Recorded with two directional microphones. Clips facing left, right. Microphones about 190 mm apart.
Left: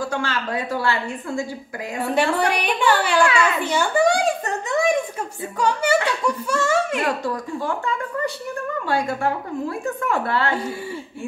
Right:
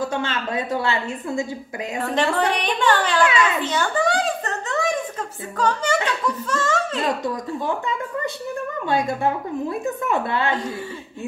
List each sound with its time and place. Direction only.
0.0 s a woman's voice: 20° right (ahead or behind)
2.1 s a woman's voice: 10° left (ahead or behind)
3.6 s a sound: 10° left (ahead or behind)
5.6 s a woman's voice: 10° left (ahead or behind)
8.8 s a woman's voice: 20° right (ahead or behind)